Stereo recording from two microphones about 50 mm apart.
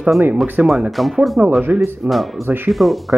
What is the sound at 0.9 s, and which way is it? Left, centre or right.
Speech, centre.